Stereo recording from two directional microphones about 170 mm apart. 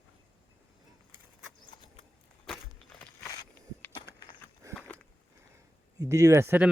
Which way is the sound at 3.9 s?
25° left (ahead or behind).